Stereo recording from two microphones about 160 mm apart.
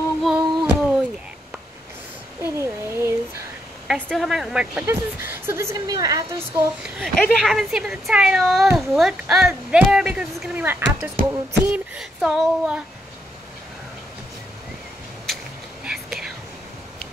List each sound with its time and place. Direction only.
0.2 s humming: 5° right (ahead or behind)
2.5 s a sound: 15° right (ahead or behind)
3.8 s speech: centre (ahead or behind)
4.8 s speech: 15° right (ahead or behind)
6.8 s speech: centre (ahead or behind)
15.8 s whispering: 5° right (ahead or behind)